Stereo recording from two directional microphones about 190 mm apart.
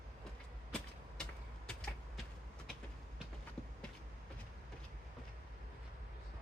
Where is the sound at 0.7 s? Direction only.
5° left (ahead or behind).